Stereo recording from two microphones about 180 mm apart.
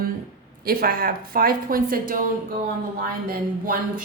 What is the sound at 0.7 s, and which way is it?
Speech, 55° right (ahead or behind).